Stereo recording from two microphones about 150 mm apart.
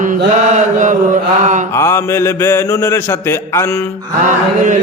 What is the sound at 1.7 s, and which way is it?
Mantra, 20° left (ahead or behind).